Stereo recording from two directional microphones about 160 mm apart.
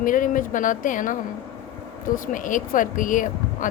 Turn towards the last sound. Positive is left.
turn(degrees=55)  # may be behind; listen again after turning